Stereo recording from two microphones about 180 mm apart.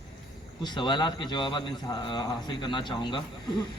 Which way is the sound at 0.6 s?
25° left (ahead or behind).